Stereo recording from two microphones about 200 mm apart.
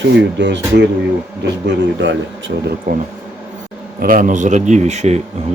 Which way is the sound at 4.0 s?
45° right (ahead or behind).